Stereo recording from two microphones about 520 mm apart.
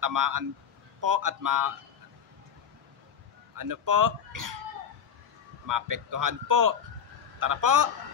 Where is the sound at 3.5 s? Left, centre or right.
Right.